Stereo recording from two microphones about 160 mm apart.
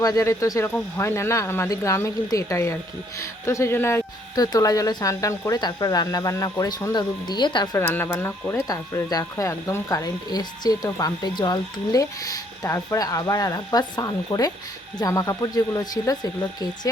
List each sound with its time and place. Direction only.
0.0 s speech: 20° left (ahead or behind)
7.8 s speech: 15° left (ahead or behind)
8.6 s speech: 25° left (ahead or behind)